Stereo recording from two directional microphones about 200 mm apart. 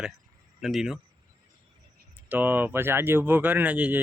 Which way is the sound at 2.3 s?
10° right (ahead or behind).